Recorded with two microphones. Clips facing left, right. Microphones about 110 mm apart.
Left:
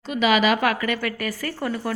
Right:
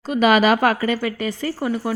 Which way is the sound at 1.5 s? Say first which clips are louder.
Right 4 dB; 10° right (ahead or behind).